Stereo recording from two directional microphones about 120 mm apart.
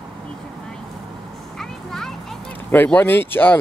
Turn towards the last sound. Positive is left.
turn(degrees=15)  # may be behind; listen again after turning